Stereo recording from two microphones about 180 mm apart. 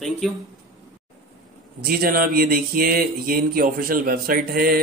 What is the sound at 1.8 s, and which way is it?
Speech, 55° right (ahead or behind).